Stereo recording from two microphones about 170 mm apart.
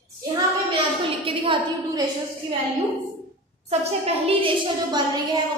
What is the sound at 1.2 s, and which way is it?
Speech, 30° right (ahead or behind).